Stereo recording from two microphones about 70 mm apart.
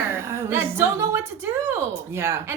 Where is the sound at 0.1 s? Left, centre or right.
Right.